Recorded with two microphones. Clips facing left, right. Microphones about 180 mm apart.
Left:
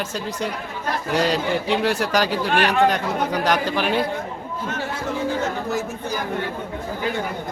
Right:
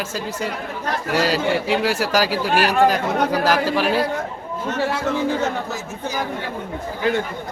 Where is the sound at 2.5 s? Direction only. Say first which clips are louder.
Right 1 dB; 35° right (ahead or behind).